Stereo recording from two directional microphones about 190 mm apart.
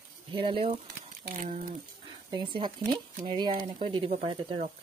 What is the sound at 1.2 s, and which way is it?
Speech, 40° right (ahead or behind).